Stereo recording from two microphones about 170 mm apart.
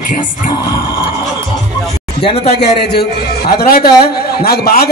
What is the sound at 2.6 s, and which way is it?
A man's voice, 70° left (ahead or behind).